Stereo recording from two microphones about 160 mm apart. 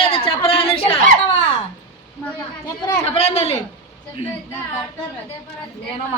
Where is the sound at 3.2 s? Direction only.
40° left (ahead or behind).